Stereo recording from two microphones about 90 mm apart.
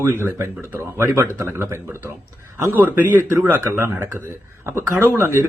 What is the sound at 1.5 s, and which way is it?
Speech, 30° right (ahead or behind).